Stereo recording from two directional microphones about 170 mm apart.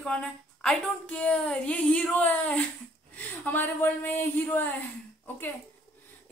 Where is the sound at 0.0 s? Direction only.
5° left (ahead or behind).